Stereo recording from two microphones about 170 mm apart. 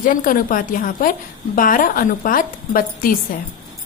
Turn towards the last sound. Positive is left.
turn(degrees=55)  # may be behind; listen again after turning